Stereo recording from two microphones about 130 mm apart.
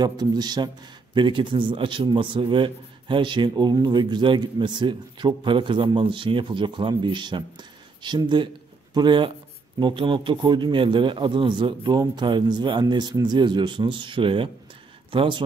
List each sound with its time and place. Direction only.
0.0 s a man's voice: 30° right (ahead or behind)